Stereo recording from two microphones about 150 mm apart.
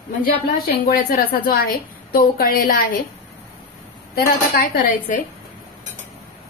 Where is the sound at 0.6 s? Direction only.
90° left; by 3.0 s 65° left (ahead or behind).